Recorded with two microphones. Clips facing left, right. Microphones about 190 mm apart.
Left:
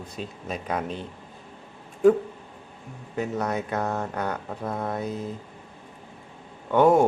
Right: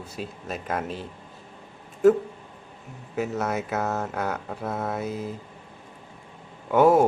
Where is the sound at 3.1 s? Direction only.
5° right (ahead or behind).